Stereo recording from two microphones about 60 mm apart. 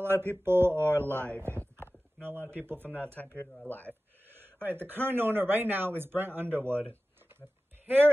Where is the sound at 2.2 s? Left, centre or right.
Right.